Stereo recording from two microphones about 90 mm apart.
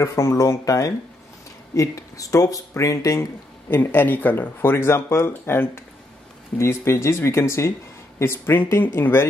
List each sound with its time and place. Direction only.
0.0 s speech: 35° left (ahead or behind)
3.7 s speech: 25° left (ahead or behind)